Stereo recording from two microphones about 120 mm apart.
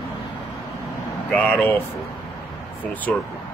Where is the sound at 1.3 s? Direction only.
10° left (ahead or behind).